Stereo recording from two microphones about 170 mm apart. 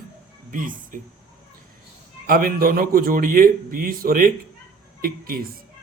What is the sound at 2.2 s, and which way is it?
A man's voice, 60° right (ahead or behind).